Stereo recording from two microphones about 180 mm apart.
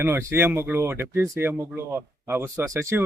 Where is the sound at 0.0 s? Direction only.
15° right (ahead or behind).